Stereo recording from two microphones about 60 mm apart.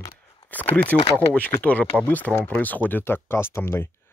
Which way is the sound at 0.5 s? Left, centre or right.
Left.